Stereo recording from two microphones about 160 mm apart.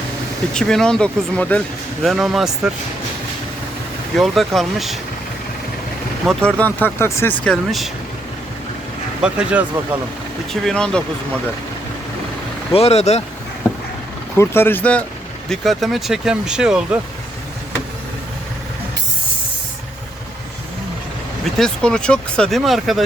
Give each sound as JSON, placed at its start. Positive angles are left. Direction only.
{"t": 0.5, "sound": "speech", "side_deg": 5}
{"t": 4.2, "sound": "speech", "side_deg": 0}
{"t": 6.2, "sound": "speech", "side_deg": 5}
{"t": 7.4, "sound": "speech", "side_deg": 0}
{"t": 9.2, "sound": "speech", "side_deg": -5}
{"t": 10.5, "sound": "speech", "side_deg": 0}
{"t": 12.7, "sound": "speech", "side_deg": 40}
{"t": 14.3, "sound": "speech", "side_deg": 15}
{"t": 21.6, "sound": "speech", "side_deg": 5}